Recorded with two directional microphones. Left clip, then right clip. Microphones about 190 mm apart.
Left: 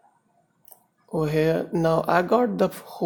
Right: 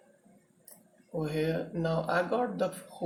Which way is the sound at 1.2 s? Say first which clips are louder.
Left 9 dB; 55° left (ahead or behind).